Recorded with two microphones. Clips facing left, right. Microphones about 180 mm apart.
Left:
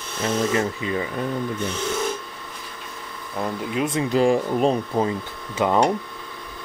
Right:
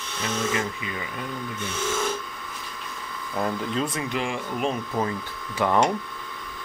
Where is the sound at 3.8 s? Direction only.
30° left (ahead or behind).